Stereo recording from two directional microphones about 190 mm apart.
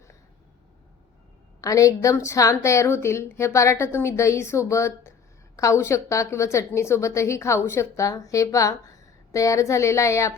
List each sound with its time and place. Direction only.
1.6 s a woman's voice: 15° left (ahead or behind)